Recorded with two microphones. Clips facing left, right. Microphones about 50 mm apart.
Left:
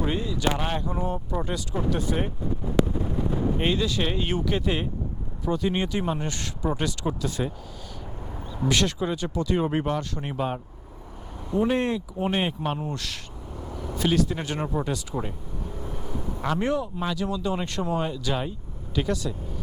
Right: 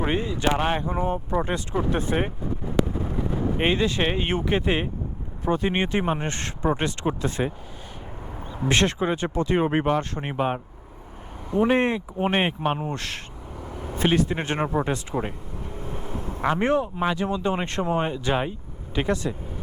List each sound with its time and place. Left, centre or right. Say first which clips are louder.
0.0 s speech: right 2 dB; right
3.6 s speech: right 6 dB; right
8.6 s speech: right 2 dB; right
15.8 s vehicle: right 2 dB; right
16.4 s speech: right 4 dB; right